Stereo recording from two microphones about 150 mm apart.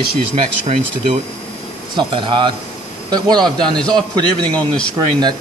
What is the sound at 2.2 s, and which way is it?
Speech, 30° right (ahead or behind).